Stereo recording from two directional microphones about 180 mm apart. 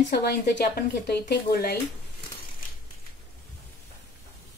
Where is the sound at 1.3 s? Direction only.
60° left (ahead or behind).